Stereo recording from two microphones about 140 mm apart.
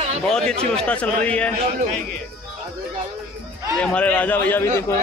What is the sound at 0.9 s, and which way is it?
Speech, 10° left (ahead or behind).